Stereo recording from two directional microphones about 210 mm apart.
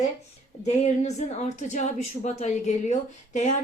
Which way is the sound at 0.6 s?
35° left (ahead or behind).